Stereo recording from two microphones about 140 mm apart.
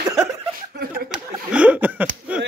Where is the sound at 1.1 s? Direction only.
10° right (ahead or behind).